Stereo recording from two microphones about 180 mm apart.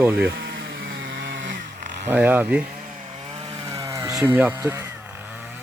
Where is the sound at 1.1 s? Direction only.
85° right.